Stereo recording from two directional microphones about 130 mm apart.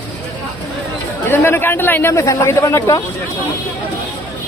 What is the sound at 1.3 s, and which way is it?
Speech, 15° left (ahead or behind).